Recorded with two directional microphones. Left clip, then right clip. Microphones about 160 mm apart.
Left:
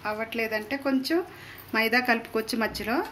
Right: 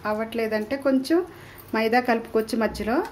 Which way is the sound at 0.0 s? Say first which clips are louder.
Right 3 dB; 30° right (ahead or behind).